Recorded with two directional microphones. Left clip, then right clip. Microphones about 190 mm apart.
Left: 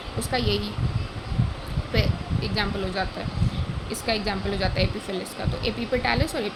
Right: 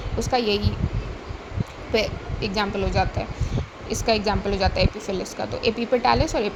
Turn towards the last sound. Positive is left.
turn(degrees=-15)  # may be behind; listen again after turning